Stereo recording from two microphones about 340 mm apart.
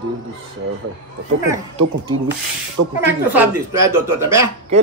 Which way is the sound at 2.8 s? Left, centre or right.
Right.